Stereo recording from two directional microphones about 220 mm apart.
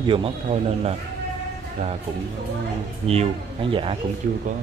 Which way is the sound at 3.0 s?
25° right (ahead or behind).